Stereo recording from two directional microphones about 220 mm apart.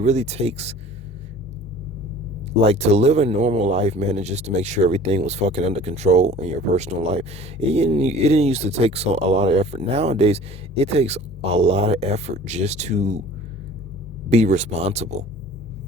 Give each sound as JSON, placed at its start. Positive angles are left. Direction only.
{"t": 0.0, "sound": "speech", "side_deg": -30}
{"t": 2.6, "sound": "speech", "side_deg": -30}
{"t": 14.3, "sound": "speech", "side_deg": -30}